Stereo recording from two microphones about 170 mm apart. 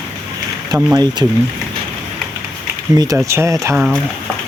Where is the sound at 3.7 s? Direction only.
5° right (ahead or behind).